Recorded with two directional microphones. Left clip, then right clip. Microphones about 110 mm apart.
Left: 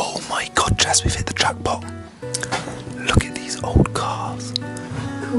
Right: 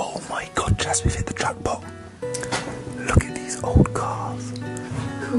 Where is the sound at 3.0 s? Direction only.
Centre (ahead or behind).